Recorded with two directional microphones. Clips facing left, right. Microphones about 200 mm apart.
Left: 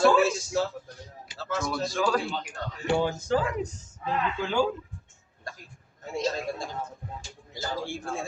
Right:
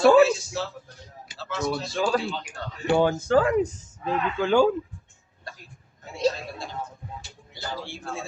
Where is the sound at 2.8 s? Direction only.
55° right (ahead or behind).